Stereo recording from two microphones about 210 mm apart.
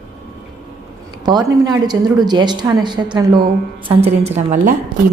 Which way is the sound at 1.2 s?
20° right (ahead or behind).